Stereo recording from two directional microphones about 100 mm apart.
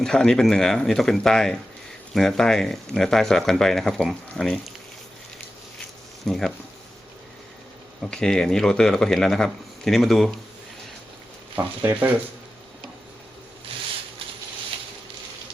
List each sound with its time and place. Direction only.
0.0 s speech: 5° left (ahead or behind)
6.2 s speech: 5° left (ahead or behind)
8.1 s speech: 5° left (ahead or behind)
11.5 s speech: 15° right (ahead or behind)